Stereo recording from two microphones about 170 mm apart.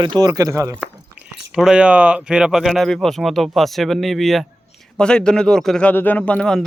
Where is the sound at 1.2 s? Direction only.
5° right (ahead or behind).